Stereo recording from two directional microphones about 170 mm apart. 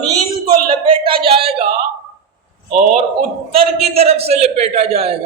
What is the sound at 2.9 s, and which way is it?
A man's voice, 35° right (ahead or behind).